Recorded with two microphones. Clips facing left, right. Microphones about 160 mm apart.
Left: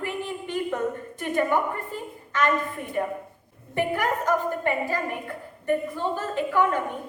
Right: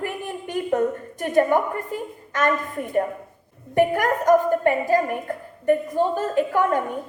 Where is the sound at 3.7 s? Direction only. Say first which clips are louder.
Right 6 dB; 45° right (ahead or behind).